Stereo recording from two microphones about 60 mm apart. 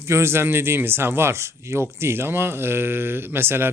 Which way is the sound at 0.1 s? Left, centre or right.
Right.